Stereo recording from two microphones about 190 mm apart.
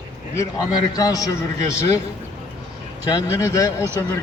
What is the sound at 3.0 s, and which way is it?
Speech, 15° left (ahead or behind).